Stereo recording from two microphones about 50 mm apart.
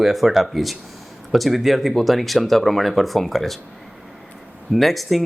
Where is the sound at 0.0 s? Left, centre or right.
Centre.